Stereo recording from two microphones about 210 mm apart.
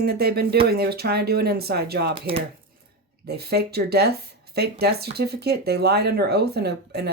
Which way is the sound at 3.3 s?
50° right (ahead or behind).